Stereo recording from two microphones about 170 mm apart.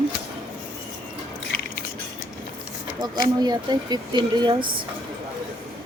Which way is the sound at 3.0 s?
25° right (ahead or behind).